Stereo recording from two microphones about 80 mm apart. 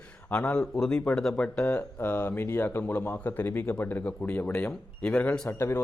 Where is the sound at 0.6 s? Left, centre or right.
Centre.